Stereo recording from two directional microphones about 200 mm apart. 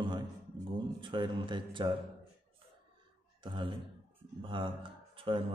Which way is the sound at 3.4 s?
25° right (ahead or behind).